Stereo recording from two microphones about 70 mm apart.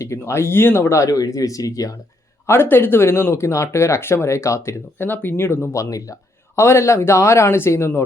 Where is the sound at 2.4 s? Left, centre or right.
Left.